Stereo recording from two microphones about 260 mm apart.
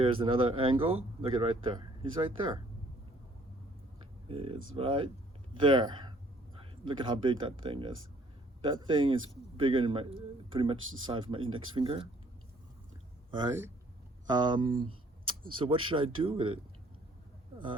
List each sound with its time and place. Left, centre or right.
0.0 s speech: centre
4.3 s speech: centre
13.3 s speech: centre
14.8 s a sound: right
15.5 s speech: centre